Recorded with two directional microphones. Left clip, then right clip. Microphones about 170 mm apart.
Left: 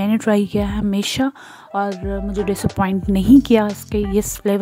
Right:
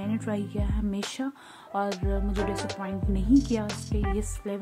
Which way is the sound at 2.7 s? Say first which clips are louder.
Left 13 dB; 65° left (ahead or behind).